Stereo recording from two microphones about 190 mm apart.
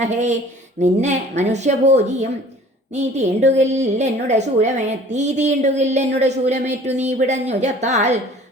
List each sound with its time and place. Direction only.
0.0 s a woman's voice: 35° right (ahead or behind)